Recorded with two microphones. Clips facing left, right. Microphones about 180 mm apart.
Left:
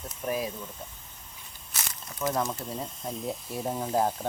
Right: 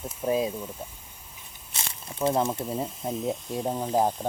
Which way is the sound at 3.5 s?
10° right (ahead or behind).